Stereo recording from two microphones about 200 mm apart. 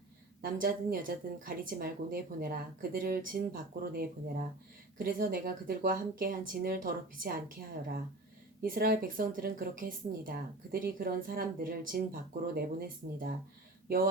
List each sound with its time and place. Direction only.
0.4 s speech: 45° right (ahead or behind)
8.6 s speech: 45° right (ahead or behind)